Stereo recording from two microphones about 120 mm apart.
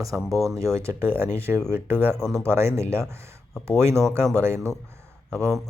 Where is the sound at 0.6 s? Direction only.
25° right (ahead or behind).